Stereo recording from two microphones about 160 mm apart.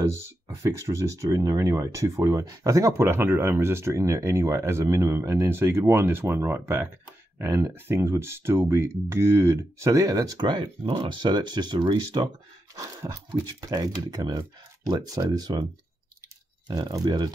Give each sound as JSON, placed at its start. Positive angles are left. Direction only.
{"t": 0.6, "sound": "speech", "side_deg": -20}
{"t": 16.6, "sound": "speech", "side_deg": -25}